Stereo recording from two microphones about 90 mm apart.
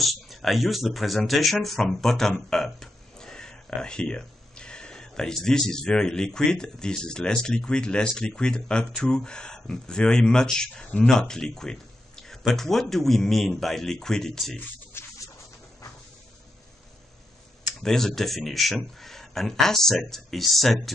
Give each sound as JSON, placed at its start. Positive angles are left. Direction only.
{"t": 0.0, "sound": "speech", "side_deg": 0}
{"t": 14.6, "sound": "speech", "side_deg": 25}
{"t": 17.7, "sound": "speech", "side_deg": 5}